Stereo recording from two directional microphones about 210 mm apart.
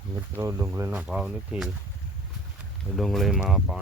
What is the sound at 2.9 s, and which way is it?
Speech, centre (ahead or behind).